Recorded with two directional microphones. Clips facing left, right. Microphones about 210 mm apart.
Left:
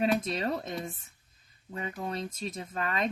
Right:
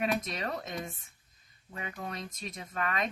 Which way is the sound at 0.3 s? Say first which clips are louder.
Left 5 dB; 30° left (ahead or behind).